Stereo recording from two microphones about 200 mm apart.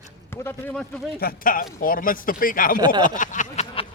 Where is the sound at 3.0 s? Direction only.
40° left (ahead or behind).